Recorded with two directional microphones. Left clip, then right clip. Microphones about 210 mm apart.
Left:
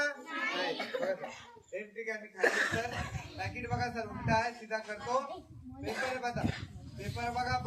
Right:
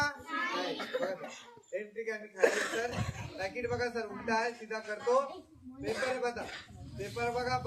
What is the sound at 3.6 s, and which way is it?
A man's voice, 35° left (ahead or behind).